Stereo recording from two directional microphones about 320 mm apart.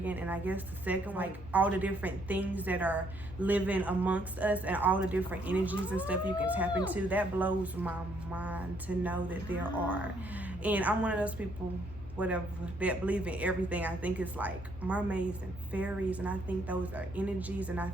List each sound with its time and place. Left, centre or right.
0.0 s speech: centre